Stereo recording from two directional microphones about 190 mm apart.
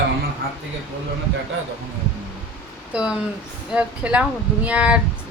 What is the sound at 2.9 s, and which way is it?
A woman's voice, 5° right (ahead or behind).